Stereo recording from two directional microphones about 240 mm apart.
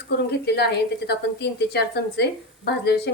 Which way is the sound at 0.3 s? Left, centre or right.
Left.